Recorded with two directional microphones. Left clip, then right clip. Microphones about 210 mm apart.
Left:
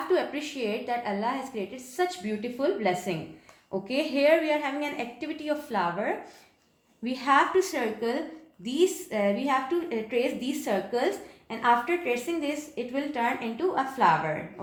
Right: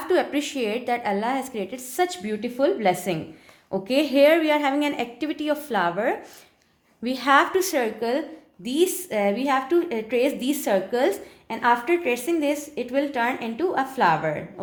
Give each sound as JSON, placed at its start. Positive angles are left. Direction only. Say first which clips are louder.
{"t": 0.1, "sound": "a woman's voice", "louder": "right 6 dB", "side_deg": -50}